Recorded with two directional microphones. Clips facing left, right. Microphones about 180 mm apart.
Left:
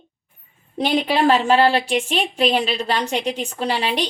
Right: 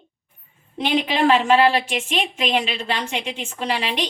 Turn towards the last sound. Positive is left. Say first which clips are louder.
# left 2 dB
turn(degrees=35)  # may be behind; listen again after turning